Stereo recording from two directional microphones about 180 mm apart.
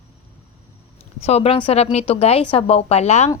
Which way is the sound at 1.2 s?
35° left (ahead or behind).